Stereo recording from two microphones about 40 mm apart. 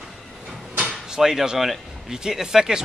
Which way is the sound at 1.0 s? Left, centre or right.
Centre.